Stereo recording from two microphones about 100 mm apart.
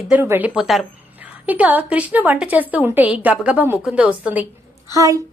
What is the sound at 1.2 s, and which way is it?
A woman's voice, 15° right (ahead or behind).